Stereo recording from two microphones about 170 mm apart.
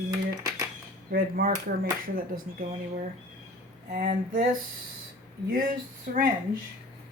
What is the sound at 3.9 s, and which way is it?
Speech, 50° right (ahead or behind).